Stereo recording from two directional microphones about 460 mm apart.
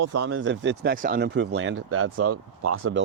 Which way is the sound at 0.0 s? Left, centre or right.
Right.